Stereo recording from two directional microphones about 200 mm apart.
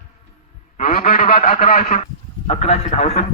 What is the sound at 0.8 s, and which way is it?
Speech, 40° left (ahead or behind).